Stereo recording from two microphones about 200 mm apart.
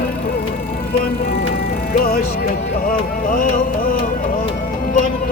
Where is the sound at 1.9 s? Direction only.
45° left (ahead or behind).